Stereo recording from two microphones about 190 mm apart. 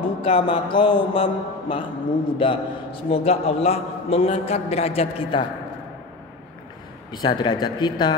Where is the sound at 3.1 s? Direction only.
30° left (ahead or behind).